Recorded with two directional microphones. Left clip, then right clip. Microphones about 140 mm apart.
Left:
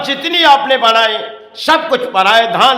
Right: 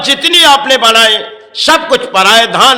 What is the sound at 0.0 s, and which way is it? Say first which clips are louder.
A man's voice: right 5 dB; 20° right (ahead or behind).